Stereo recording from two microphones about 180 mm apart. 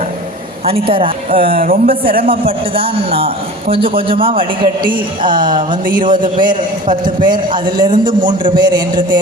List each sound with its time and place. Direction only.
0.6 s speech: 30° right (ahead or behind)
1.5 s speech: 50° right (ahead or behind)
2.5 s a man's voice: 30° right (ahead or behind)